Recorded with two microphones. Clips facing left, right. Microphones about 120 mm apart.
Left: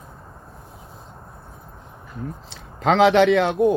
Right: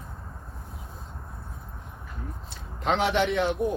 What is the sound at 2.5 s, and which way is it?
Speech, 90° left.